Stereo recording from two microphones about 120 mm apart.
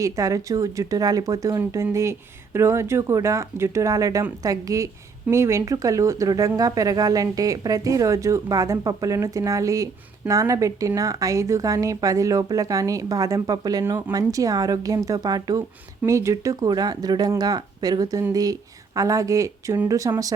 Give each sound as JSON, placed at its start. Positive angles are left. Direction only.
{"t": 0.0, "sound": "a woman's voice", "side_deg": -30}